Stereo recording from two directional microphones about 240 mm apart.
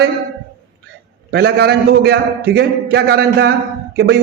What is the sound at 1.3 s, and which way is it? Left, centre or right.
A man's voice, right.